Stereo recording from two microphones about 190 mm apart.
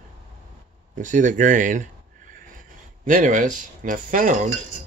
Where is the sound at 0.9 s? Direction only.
40° right (ahead or behind).